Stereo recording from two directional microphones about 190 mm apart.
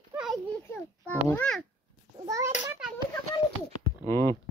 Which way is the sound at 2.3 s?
15° right (ahead or behind).